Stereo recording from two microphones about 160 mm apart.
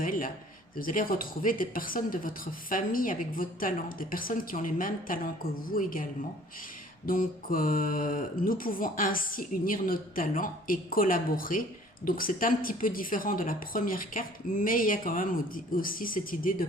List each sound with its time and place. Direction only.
0.0 s speech: 60° left (ahead or behind)